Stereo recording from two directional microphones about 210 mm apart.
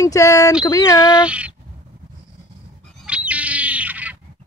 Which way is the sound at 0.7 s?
15° left (ahead or behind).